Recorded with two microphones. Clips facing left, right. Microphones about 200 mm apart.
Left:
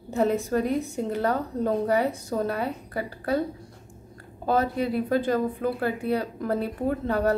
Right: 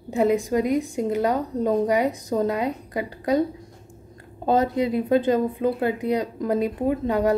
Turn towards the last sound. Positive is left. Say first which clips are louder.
# right 3 dB
turn(degrees=-15)  # may be behind; listen again after turning